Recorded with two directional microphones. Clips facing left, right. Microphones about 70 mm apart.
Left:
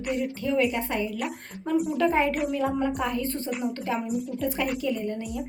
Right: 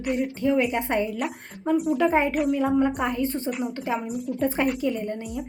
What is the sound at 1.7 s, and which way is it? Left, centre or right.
Speech, centre.